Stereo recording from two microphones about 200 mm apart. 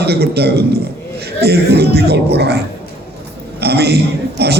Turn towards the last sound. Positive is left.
turn(degrees=-55)  # may be behind; listen again after turning